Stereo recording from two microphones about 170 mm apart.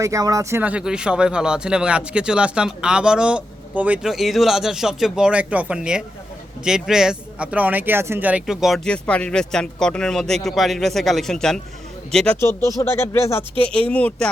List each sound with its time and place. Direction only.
0.0 s speech: 20° right (ahead or behind)
0.6 s speech: 5° right (ahead or behind); by 14.3 s 10° left (ahead or behind)